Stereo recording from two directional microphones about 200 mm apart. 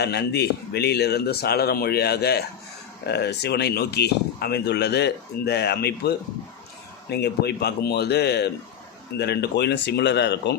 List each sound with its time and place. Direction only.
0.0 s a man's voice: 55° left (ahead or behind)